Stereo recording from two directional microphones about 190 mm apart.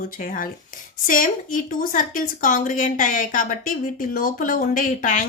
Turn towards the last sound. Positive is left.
turn(degrees=45)  # may be behind; listen again after turning